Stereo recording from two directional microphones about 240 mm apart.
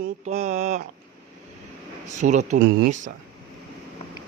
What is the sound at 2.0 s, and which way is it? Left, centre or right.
Mantra, right.